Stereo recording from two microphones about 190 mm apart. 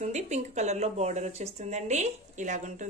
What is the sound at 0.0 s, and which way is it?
Speech, 35° right (ahead or behind).